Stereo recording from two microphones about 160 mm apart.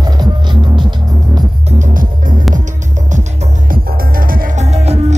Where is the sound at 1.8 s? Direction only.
55° right (ahead or behind).